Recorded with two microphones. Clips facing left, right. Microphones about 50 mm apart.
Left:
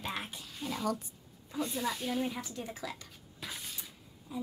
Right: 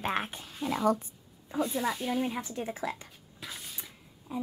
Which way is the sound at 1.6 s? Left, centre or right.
Centre.